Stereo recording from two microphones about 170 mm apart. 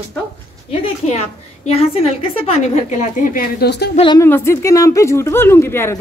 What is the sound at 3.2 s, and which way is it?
Speech, 55° left (ahead or behind).